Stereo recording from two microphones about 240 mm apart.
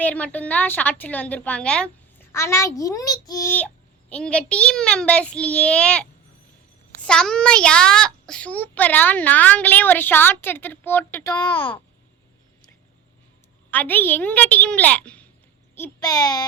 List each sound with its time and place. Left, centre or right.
0.0 s a child's voice: centre
7.1 s a child's voice: centre
13.7 s a child's voice: centre